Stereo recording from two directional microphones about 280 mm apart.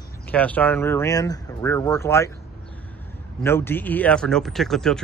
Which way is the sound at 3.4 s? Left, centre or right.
Centre.